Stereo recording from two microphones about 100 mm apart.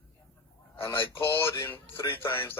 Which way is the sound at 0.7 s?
25° left (ahead or behind).